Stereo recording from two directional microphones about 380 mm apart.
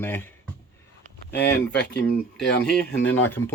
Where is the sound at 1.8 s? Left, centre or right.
Left.